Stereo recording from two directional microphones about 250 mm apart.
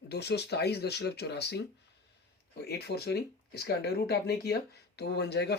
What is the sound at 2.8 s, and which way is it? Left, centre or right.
Speech, left.